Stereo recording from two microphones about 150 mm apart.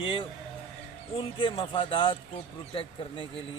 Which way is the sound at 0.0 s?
35° left (ahead or behind).